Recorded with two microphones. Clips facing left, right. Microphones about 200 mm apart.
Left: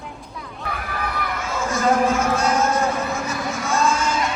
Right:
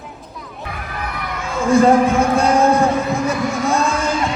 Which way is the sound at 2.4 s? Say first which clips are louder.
Right 6 dB; 30° right (ahead or behind).